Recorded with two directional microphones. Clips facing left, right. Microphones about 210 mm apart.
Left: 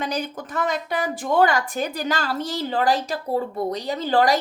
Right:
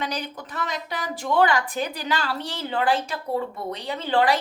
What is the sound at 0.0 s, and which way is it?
A woman's voice, 45° left (ahead or behind).